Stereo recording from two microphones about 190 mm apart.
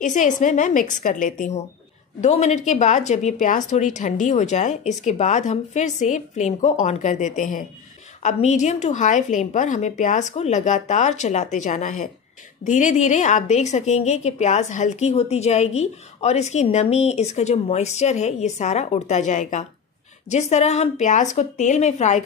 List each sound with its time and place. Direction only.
0.0 s a woman's voice: 40° left (ahead or behind)